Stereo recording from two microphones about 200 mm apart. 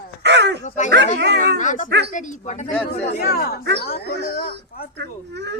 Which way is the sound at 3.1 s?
50° left (ahead or behind).